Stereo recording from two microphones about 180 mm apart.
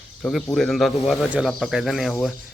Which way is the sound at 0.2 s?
Centre (ahead or behind).